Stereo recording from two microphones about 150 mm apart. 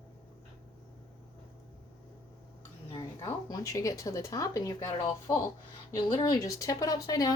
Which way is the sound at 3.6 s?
20° left (ahead or behind).